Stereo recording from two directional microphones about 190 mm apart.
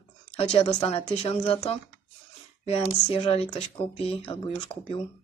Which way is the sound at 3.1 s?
30° left (ahead or behind).